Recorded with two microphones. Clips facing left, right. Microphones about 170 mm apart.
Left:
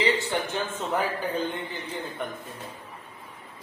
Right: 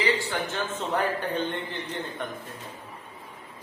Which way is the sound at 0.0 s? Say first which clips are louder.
Left 1 dB; 20° left (ahead or behind).